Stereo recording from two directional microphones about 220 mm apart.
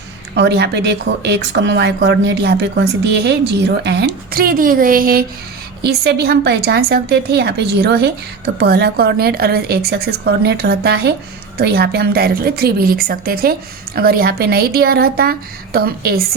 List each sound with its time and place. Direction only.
0.3 s a woman's voice: 50° right (ahead or behind)